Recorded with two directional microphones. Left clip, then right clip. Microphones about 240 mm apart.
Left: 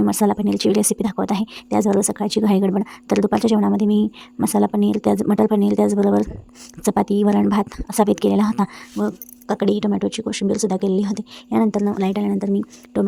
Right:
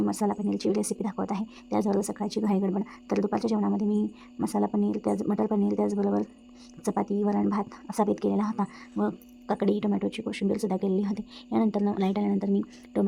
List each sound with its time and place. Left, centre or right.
0.0 s a woman's voice: left